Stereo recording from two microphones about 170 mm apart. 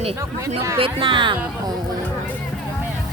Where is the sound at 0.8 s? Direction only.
30° right (ahead or behind).